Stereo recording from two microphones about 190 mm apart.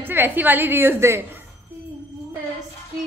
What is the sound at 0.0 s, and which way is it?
A woman's voice, 10° right (ahead or behind).